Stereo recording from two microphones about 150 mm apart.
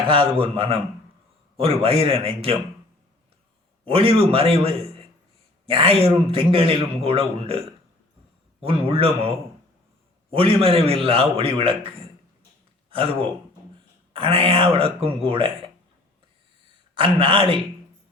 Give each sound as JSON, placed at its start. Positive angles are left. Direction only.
{"t": 0.1, "sound": "speech", "side_deg": -35}
{"t": 3.8, "sound": "speech", "side_deg": -40}
{"t": 8.6, "sound": "speech", "side_deg": -40}
{"t": 12.9, "sound": "speech", "side_deg": -35}
{"t": 16.9, "sound": "speech", "side_deg": -35}